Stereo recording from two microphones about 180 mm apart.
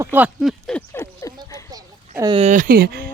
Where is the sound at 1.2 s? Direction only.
20° left (ahead or behind).